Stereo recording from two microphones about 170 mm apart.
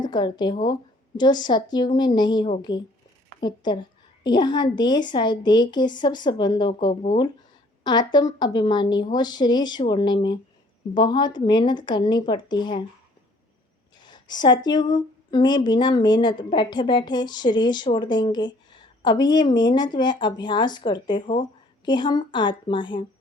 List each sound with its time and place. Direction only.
0.0 s a woman's voice: 25° left (ahead or behind)
14.0 s speech: 25° left (ahead or behind)